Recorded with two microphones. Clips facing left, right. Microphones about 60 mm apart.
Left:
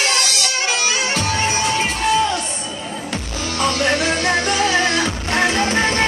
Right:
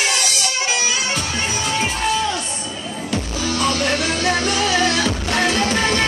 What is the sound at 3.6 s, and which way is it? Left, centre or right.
Music, left.